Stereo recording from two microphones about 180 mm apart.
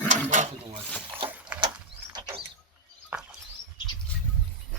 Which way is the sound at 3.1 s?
10° right (ahead or behind).